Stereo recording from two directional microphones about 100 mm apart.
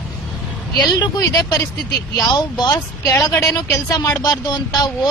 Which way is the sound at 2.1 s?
40° left (ahead or behind).